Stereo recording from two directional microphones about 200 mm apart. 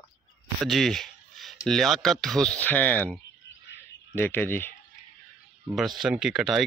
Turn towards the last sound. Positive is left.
turn(degrees=0)  # may be behind; listen again after turning